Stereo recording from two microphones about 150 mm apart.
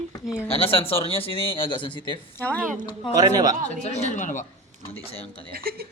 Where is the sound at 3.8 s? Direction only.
50° left (ahead or behind).